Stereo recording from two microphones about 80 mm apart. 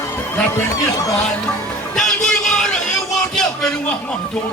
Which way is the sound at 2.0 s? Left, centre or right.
Centre.